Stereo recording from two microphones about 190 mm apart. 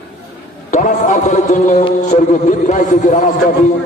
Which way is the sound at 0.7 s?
40° left (ahead or behind).